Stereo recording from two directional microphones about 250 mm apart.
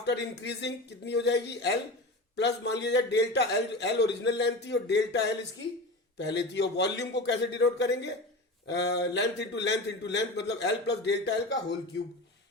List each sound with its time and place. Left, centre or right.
0.0 s a man's voice: left